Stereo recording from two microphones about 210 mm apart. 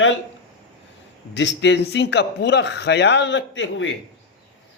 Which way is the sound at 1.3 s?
60° left (ahead or behind).